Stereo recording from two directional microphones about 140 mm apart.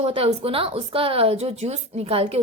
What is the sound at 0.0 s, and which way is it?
A woman's voice, 45° right (ahead or behind).